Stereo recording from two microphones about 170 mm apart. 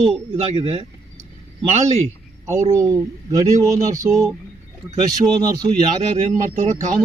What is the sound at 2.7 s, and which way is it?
Speech, 20° right (ahead or behind).